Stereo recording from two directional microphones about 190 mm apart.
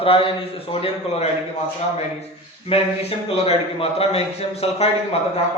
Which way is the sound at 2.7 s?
30° left (ahead or behind).